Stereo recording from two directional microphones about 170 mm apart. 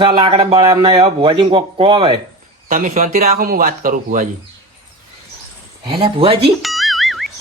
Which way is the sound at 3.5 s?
55° right (ahead or behind).